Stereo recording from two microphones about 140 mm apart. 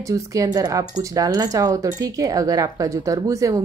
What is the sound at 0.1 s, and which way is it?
Speech, 25° right (ahead or behind).